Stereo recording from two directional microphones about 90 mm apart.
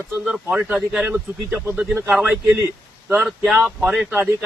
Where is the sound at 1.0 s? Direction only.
20° right (ahead or behind).